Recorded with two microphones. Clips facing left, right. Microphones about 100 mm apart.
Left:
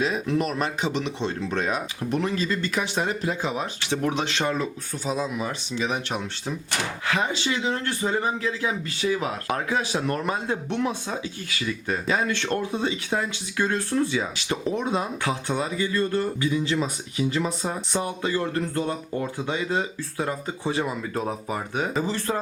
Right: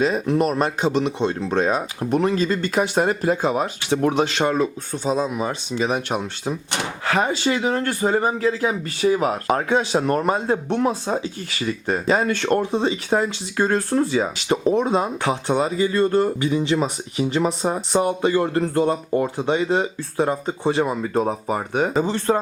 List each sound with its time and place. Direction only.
0.0 s speech: 45° right (ahead or behind); by 5.5 s 30° right (ahead or behind)
5.7 s speech: 40° right (ahead or behind)